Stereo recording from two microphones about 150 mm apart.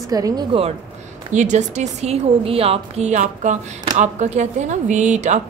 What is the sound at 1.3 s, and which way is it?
A woman's voice, 55° right (ahead or behind).